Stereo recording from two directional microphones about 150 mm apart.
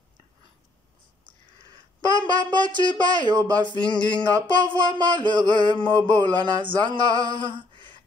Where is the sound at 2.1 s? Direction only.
30° right (ahead or behind).